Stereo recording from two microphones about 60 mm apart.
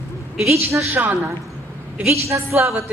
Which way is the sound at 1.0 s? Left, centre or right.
Right.